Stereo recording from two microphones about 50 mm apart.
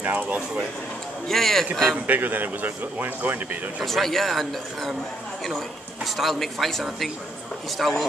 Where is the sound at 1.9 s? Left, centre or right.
Right.